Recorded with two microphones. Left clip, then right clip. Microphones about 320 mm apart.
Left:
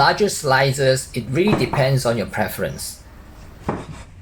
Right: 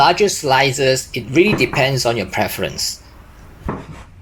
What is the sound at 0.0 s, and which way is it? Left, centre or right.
Speech, right.